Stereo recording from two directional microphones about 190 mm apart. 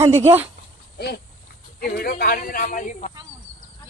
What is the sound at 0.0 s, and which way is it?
Speech, 35° right (ahead or behind).